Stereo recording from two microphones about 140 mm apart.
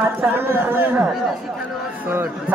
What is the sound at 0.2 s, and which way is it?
Speech, 15° right (ahead or behind).